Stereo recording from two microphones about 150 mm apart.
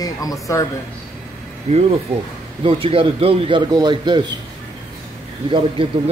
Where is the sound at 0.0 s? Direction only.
25° left (ahead or behind).